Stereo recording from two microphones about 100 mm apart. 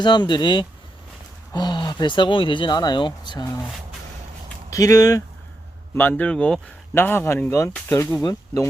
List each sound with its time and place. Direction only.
0.0 s speech: 50° left (ahead or behind)
4.7 s speech: 35° left (ahead or behind)
5.9 s speech: 20° left (ahead or behind)
6.9 s speech: 20° left (ahead or behind)
8.2 s speech: 45° left (ahead or behind)